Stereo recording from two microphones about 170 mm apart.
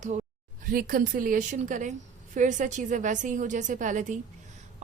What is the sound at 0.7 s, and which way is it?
A woman's voice, 55° right (ahead or behind).